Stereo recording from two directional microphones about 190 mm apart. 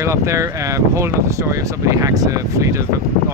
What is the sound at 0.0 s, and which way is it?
Speech, 15° right (ahead or behind).